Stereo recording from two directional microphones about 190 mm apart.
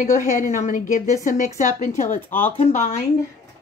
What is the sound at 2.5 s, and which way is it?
Speech, 40° left (ahead or behind).